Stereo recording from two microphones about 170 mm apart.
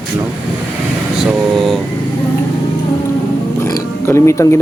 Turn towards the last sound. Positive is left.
turn(degrees=15)  # may be behind; listen again after turning